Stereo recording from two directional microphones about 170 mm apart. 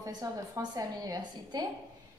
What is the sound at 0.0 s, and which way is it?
A woman's voice, 20° right (ahead or behind).